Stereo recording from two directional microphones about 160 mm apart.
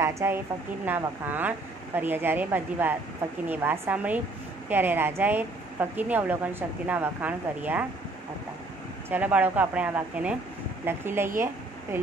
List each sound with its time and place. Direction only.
0.0 s a woman's voice: 15° right (ahead or behind)
9.1 s speech: 10° right (ahead or behind)